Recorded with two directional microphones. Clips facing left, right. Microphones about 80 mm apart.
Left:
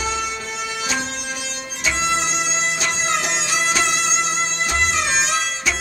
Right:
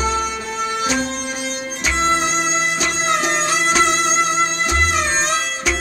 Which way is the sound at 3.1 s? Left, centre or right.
Right.